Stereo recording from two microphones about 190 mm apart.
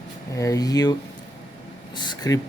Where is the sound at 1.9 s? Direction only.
20° left (ahead or behind).